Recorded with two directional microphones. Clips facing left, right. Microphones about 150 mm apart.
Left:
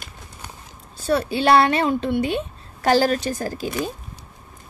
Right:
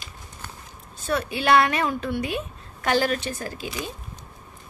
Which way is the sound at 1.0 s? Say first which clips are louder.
Left 5 dB; 35° left (ahead or behind).